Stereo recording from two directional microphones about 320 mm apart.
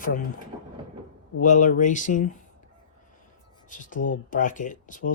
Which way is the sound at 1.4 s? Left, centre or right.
Left.